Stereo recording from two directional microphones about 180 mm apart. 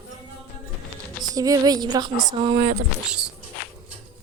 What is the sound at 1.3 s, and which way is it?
Speech, 20° right (ahead or behind).